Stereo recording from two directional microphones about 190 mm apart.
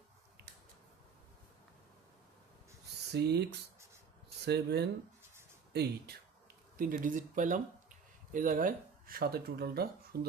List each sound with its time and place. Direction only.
3.1 s speech: 60° right (ahead or behind)
6.7 s speech: 45° right (ahead or behind)